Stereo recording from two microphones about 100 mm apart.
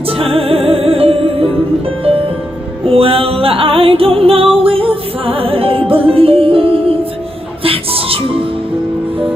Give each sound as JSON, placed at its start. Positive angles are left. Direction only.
{"t": 0.2, "sound": "music", "side_deg": -70}
{"t": 2.8, "sound": "music", "side_deg": -70}